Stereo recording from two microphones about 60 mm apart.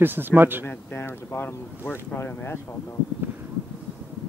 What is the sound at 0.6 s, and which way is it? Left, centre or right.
Speech, left.